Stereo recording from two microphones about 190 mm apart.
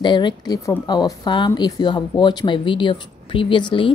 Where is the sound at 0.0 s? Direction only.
25° left (ahead or behind).